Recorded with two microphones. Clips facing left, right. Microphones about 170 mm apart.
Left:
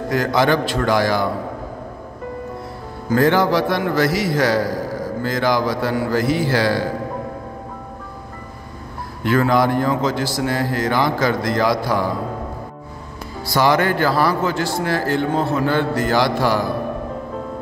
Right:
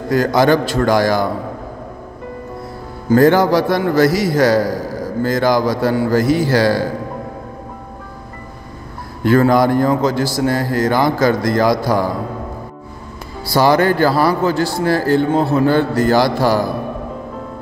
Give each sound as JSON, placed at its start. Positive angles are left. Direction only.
{"t": 0.1, "sound": "a man's voice", "side_deg": -40}
{"t": 3.1, "sound": "a man's voice", "side_deg": -40}
{"t": 9.2, "sound": "a man's voice", "side_deg": -40}
{"t": 13.5, "sound": "a man's voice", "side_deg": -35}